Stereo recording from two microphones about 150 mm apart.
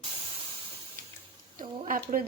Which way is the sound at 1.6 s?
65° right (ahead or behind).